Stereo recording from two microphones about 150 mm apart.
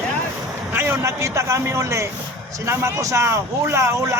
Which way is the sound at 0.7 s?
15° right (ahead or behind).